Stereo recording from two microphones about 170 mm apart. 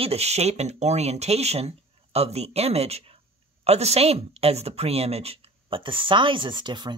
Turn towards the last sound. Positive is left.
turn(degrees=-25)  # may be behind; listen again after turning